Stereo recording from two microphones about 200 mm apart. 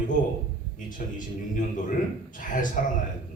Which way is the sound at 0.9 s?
40° left (ahead or behind).